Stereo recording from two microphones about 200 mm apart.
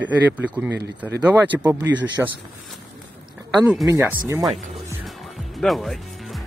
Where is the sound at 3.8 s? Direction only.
15° right (ahead or behind).